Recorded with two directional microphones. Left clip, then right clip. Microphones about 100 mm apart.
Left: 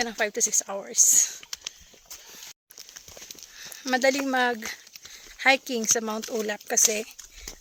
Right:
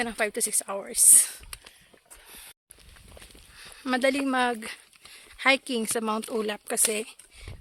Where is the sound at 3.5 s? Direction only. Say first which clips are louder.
Left 2 dB; 30° right (ahead or behind).